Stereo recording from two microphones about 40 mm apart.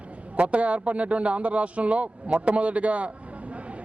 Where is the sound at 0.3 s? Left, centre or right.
Right.